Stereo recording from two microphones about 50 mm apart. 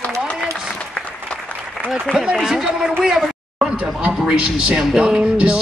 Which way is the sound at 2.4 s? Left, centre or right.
Centre.